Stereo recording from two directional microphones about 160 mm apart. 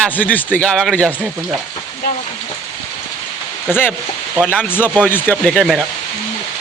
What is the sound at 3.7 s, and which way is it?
Speech, 15° left (ahead or behind).